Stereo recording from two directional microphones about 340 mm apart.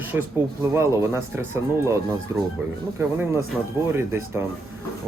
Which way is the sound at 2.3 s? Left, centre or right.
Centre.